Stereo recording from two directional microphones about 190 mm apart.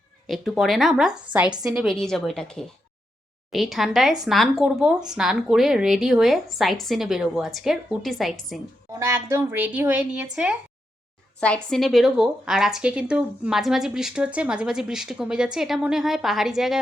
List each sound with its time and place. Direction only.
0.3 s speech: centre (ahead or behind)
8.9 s speech: 15° right (ahead or behind)
11.3 s speech: 5° left (ahead or behind)